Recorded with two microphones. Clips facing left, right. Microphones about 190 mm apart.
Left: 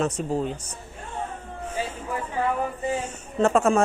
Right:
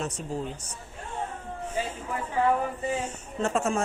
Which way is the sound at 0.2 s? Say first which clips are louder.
Left 8 dB; 75° left (ahead or behind).